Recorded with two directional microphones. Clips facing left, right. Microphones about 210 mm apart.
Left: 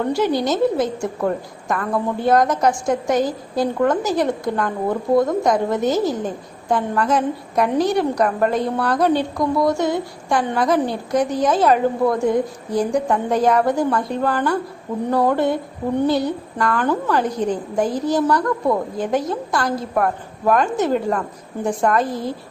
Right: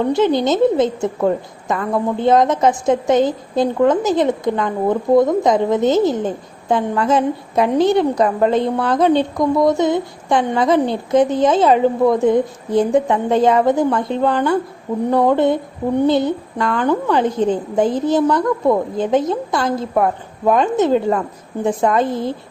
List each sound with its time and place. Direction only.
0.0 s a woman's voice: 20° right (ahead or behind)